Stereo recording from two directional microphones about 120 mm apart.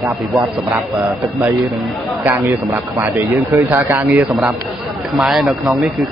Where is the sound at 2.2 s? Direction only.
20° right (ahead or behind); by 5.9 s centre (ahead or behind).